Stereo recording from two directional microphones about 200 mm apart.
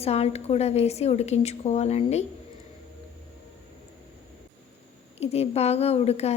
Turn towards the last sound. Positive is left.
turn(degrees=30)  # may be behind; listen again after turning